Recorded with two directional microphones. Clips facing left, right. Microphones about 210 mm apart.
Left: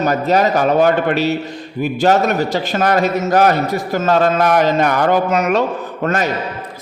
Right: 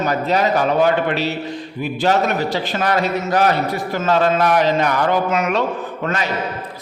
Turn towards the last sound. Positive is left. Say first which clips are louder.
# left 3 dB
turn(degrees=45)  # may be behind; listen again after turning